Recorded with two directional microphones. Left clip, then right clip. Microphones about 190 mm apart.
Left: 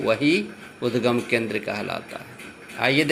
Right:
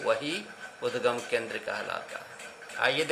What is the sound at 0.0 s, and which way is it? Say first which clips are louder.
Speech: left 8 dB; 15° left (ahead or behind).